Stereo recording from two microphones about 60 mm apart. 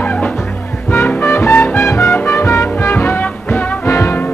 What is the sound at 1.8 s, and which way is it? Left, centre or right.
Music, left.